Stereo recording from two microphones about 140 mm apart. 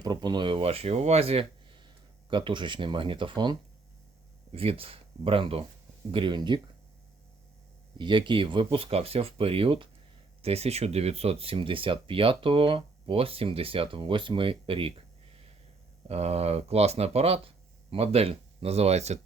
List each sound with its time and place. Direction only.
0.0 s speech: 30° right (ahead or behind)
4.5 s speech: 40° right (ahead or behind)
7.9 s speech: 35° right (ahead or behind)
16.0 s speech: 50° right (ahead or behind)